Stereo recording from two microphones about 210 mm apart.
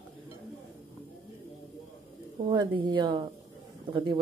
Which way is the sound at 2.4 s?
20° right (ahead or behind).